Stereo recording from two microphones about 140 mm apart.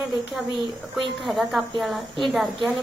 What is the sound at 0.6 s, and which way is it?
Speech, 35° right (ahead or behind).